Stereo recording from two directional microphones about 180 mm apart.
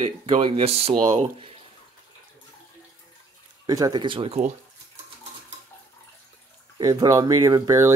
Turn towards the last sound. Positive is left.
turn(degrees=-15)  # may be behind; listen again after turning